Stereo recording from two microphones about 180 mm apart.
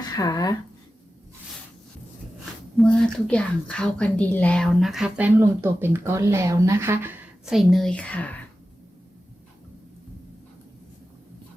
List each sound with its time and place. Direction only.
0.2 s speech: 20° left (ahead or behind)
2.7 s a woman's voice: 5° left (ahead or behind); by 7.2 s 10° right (ahead or behind)
7.5 s speech: centre (ahead or behind)